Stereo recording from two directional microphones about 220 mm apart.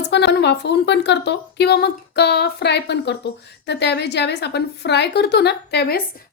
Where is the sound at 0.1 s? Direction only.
50° left (ahead or behind).